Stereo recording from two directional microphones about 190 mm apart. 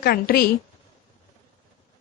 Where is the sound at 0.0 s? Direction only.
50° left (ahead or behind).